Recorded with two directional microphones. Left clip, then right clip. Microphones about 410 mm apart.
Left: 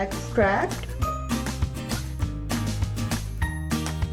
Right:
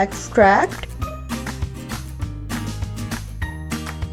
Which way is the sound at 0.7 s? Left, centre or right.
Centre.